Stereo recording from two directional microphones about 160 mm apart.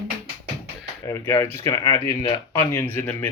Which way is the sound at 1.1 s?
15° left (ahead or behind).